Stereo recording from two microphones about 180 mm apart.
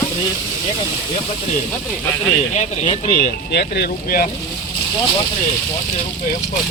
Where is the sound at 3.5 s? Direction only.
60° left (ahead or behind).